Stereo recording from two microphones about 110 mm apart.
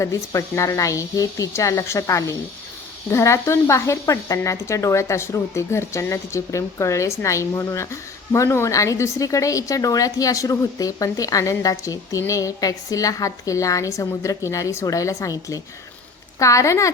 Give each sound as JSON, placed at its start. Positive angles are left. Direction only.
{"t": 0.0, "sound": "speech", "side_deg": 25}